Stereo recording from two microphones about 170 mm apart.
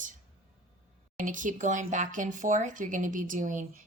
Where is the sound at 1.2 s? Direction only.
50° right (ahead or behind).